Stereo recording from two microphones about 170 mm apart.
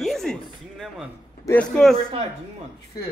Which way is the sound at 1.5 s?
5° left (ahead or behind).